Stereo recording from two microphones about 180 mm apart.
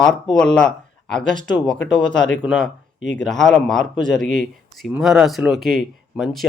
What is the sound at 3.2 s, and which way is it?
Speech, centre (ahead or behind).